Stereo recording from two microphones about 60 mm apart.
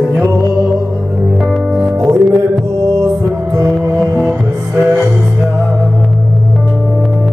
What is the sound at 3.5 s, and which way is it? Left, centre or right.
Music, right.